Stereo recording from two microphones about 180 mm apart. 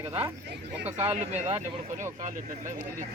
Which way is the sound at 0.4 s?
70° right (ahead or behind).